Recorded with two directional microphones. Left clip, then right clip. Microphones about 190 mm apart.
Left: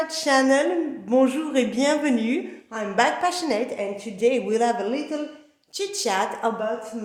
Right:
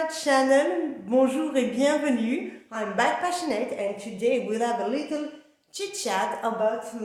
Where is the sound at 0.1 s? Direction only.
30° left (ahead or behind).